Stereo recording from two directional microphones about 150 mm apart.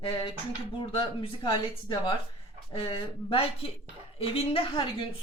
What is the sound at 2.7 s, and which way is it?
Speech, 40° left (ahead or behind).